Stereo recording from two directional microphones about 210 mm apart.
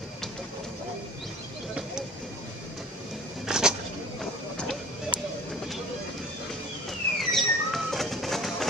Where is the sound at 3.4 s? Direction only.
5° right (ahead or behind).